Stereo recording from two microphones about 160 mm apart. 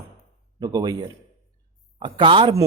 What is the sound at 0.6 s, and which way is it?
Speech, 25° right (ahead or behind).